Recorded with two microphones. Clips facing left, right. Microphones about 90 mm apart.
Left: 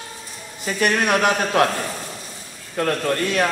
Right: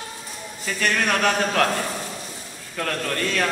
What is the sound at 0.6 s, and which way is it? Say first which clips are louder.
A man's voice: left 4 dB; 20° left (ahead or behind).